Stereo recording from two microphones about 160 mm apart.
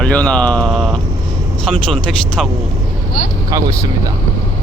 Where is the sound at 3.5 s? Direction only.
20° right (ahead or behind).